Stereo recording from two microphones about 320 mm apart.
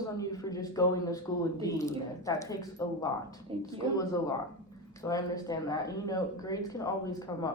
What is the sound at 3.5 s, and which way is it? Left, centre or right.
Speech, centre.